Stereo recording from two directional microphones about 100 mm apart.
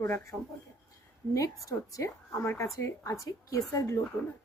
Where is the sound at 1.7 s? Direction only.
35° left (ahead or behind).